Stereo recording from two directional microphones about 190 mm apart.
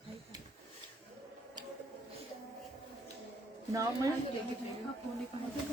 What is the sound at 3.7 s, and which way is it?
Speech, 15° right (ahead or behind).